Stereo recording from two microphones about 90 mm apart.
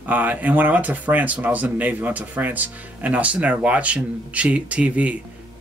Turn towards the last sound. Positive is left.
turn(degrees=-15)  # may be behind; listen again after turning